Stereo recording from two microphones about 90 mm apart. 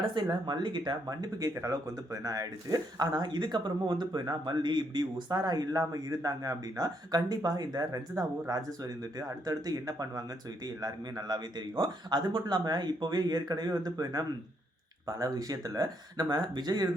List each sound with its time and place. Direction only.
0.0 s speech: 60° right (ahead or behind)
1.0 s speech: 40° right (ahead or behind)